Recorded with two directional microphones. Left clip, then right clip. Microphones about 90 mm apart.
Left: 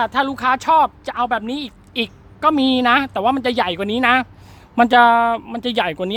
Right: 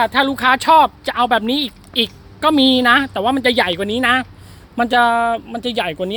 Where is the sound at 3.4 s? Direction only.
20° left (ahead or behind).